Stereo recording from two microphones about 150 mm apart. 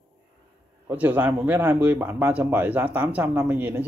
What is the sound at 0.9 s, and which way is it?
Speech, 10° right (ahead or behind).